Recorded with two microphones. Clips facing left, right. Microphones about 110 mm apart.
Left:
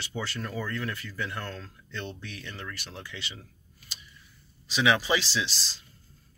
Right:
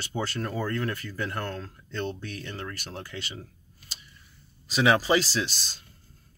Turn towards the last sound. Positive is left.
turn(degrees=-50)  # may be behind; listen again after turning